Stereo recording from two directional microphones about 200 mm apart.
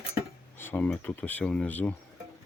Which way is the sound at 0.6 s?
10° left (ahead or behind).